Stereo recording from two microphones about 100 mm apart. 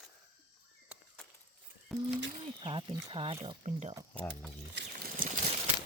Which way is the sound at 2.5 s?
55° right (ahead or behind).